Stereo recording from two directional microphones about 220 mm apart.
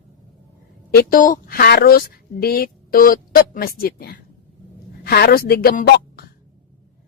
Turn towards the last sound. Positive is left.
turn(degrees=45)  # may be behind; listen again after turning